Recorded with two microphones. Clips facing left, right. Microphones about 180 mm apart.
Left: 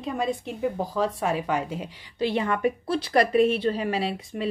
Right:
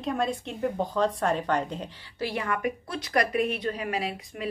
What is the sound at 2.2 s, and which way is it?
A woman's voice, 20° left (ahead or behind).